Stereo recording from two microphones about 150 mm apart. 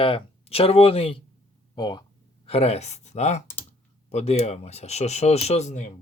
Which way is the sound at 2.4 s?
45° left (ahead or behind).